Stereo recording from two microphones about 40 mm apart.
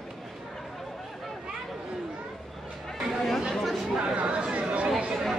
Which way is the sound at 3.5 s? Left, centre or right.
Centre.